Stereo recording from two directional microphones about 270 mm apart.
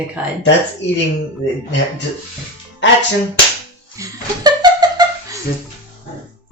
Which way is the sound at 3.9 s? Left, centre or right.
Centre.